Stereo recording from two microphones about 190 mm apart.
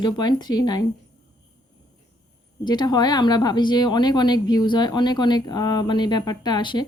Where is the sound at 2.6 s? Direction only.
20° left (ahead or behind).